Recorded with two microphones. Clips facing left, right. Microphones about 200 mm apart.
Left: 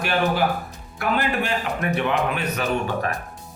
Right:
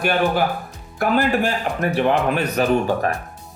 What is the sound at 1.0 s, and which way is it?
Speech, 40° right (ahead or behind).